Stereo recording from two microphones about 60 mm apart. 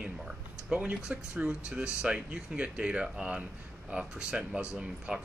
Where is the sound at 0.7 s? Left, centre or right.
Centre.